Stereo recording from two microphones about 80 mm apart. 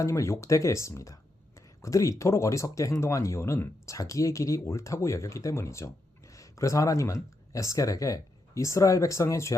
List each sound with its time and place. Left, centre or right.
0.0 s speech: left